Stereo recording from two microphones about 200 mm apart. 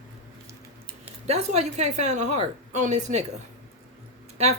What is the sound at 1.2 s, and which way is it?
A woman's voice, 35° right (ahead or behind).